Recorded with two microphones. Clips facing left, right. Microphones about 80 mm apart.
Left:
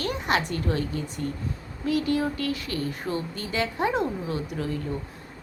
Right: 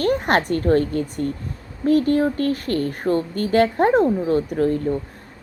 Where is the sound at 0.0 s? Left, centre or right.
Right.